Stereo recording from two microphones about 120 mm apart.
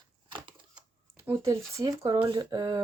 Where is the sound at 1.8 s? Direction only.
35° right (ahead or behind).